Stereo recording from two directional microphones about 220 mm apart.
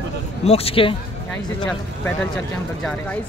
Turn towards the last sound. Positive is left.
turn(degrees=5)  # may be behind; listen again after turning